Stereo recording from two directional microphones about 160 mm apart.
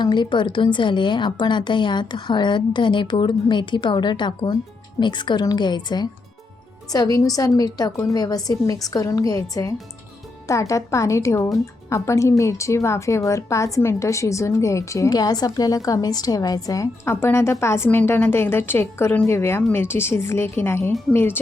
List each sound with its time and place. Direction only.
0.0 s a woman's voice: 30° left (ahead or behind); by 21.3 s 15° left (ahead or behind)